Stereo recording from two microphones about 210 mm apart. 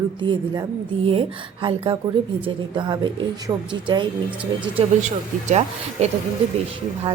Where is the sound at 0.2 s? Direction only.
20° right (ahead or behind).